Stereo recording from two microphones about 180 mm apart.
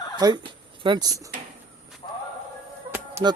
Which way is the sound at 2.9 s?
10° right (ahead or behind).